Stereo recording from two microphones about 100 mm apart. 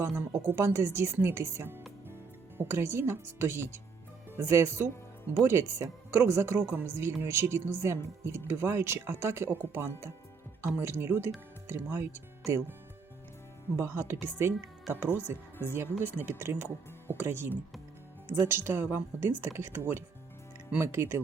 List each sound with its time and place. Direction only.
0.0 s speech: 25° right (ahead or behind)
13.7 s speech: 25° right (ahead or behind)